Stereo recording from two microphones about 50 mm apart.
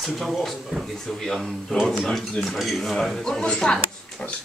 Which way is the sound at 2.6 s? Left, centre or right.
Centre.